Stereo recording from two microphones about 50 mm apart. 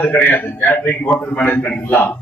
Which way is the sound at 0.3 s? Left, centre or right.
Left.